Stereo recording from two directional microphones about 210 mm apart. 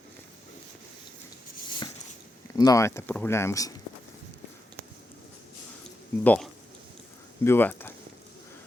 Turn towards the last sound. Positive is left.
turn(degrees=10)  # may be behind; listen again after turning